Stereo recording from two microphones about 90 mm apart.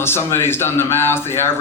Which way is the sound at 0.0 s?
25° left (ahead or behind).